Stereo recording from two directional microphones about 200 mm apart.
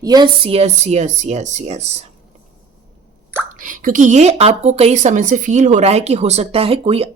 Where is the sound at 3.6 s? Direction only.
45° right (ahead or behind).